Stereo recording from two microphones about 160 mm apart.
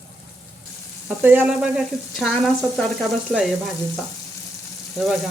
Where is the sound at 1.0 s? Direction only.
10° right (ahead or behind); by 3.5 s 5° left (ahead or behind).